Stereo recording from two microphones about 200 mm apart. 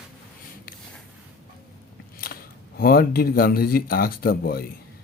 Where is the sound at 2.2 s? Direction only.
45° left (ahead or behind).